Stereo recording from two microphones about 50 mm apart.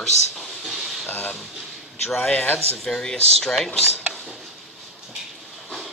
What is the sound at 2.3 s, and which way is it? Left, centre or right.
Speech, left.